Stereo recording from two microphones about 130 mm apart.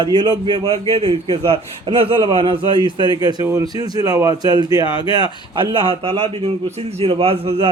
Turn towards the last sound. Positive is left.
turn(degrees=-45)  # may be behind; listen again after turning